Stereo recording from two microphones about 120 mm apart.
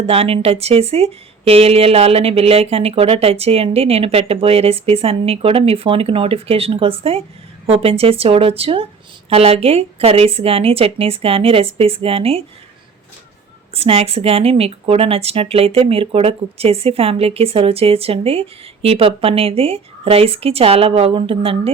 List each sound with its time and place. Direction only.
0.1 s speech: 55° right (ahead or behind)
13.7 s speech: 55° right (ahead or behind)